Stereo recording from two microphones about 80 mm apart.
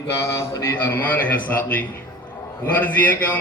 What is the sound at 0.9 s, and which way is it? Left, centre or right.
A man's voice, left.